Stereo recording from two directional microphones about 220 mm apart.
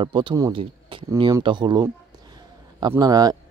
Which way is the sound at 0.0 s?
20° right (ahead or behind).